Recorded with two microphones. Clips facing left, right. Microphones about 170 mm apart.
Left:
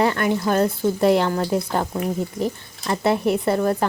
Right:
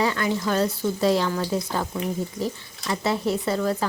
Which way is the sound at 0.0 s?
55° left (ahead or behind).